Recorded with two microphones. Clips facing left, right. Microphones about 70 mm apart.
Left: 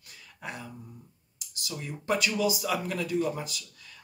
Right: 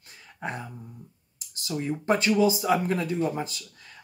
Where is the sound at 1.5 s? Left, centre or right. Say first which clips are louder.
Right 8 dB; right.